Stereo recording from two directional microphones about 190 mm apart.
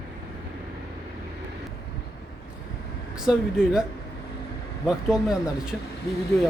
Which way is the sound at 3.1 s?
5° right (ahead or behind).